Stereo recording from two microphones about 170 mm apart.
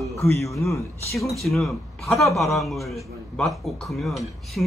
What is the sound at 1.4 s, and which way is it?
A woman's voice, centre (ahead or behind).